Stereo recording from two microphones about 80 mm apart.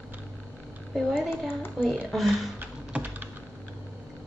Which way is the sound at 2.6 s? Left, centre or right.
Right.